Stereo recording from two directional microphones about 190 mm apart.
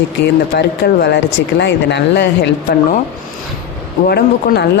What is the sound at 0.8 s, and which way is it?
Speech, 60° left (ahead or behind).